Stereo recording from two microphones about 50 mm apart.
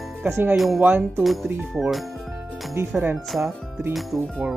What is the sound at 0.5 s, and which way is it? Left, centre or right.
Speech, centre.